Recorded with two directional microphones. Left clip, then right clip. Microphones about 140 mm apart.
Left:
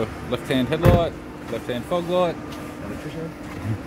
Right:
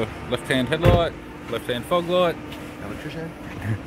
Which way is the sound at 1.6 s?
15° right (ahead or behind).